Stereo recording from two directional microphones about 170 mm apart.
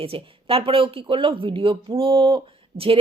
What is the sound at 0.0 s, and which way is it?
Speech, 35° right (ahead or behind).